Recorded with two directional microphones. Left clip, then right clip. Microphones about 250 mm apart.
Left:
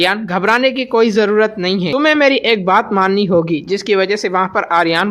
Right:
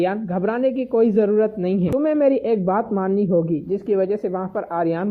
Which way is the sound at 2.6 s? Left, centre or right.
Centre.